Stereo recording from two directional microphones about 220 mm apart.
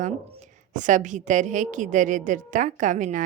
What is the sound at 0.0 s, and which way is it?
A woman's voice, 35° right (ahead or behind).